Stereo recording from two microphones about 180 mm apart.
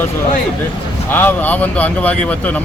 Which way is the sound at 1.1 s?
10° left (ahead or behind).